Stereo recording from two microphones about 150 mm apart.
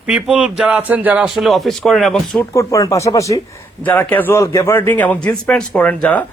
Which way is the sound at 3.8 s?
10° left (ahead or behind).